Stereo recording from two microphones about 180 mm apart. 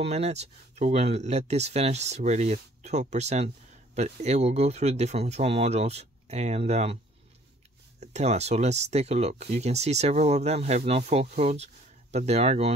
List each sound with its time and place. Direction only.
0.0 s speech: 35° right (ahead or behind)
8.0 s speech: 40° right (ahead or behind)